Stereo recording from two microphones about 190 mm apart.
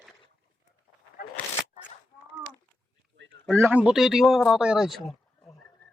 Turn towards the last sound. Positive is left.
turn(degrees=0)  # may be behind; listen again after turning